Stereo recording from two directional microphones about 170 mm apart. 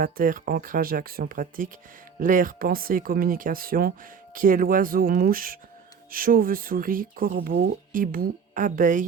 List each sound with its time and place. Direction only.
0.0 s speech: 55° right (ahead or behind)